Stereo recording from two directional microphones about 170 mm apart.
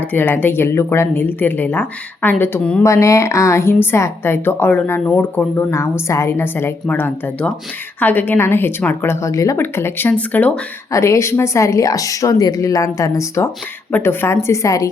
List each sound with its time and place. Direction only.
0.1 s a woman's voice: 10° left (ahead or behind)